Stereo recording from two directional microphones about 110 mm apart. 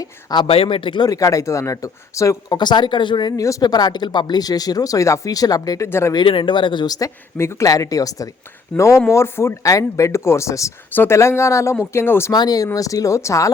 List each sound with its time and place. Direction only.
0.0 s speech: 40° left (ahead or behind)
0.4 s speech: 60° left (ahead or behind)
1.0 s speech: 30° left (ahead or behind)
2.6 s speech: 40° left (ahead or behind); by 6.1 s 25° left (ahead or behind)
6.1 s speech: 50° left (ahead or behind); by 12.3 s 20° left (ahead or behind)
12.3 s speech: 35° left (ahead or behind)